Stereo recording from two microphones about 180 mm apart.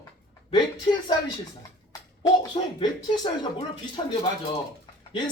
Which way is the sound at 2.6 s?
35° left (ahead or behind).